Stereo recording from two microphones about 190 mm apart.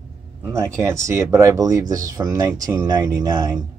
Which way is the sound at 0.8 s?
15° right (ahead or behind).